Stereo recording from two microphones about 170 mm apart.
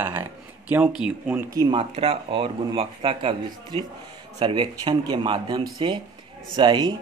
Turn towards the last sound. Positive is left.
turn(degrees=-25)  # may be behind; listen again after turning